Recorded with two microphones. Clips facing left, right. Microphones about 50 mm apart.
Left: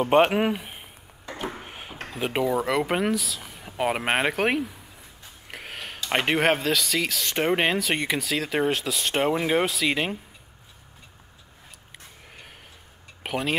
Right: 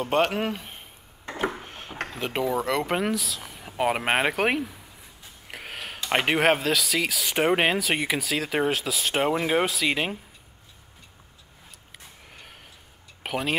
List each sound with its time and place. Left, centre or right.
0.0 s speech: centre
1.6 s drawer open or close: centre
2.0 s speech: centre
5.5 s a sound: centre
5.9 s speech: centre
11.9 s a sound: centre
13.2 s speech: centre